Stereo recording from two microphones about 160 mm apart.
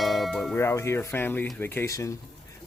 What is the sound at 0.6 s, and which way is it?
Speech, 15° left (ahead or behind).